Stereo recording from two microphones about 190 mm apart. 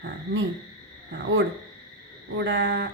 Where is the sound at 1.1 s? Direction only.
90° right.